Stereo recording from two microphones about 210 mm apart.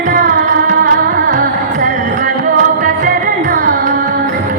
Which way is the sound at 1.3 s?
40° right (ahead or behind).